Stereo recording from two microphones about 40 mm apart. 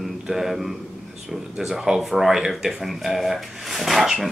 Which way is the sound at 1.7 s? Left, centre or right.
Centre.